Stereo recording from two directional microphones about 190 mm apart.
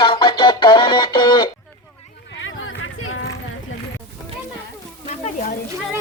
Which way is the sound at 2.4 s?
90° left.